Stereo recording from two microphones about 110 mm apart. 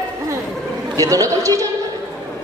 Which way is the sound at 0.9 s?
30° right (ahead or behind).